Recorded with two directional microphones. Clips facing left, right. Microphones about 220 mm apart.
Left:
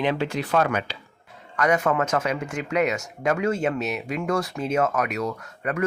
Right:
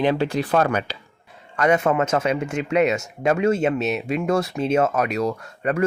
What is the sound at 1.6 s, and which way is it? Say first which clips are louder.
Speech: right 3 dB; 25° right (ahead or behind).